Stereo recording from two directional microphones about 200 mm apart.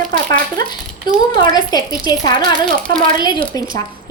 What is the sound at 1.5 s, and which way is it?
A woman's voice, 20° left (ahead or behind).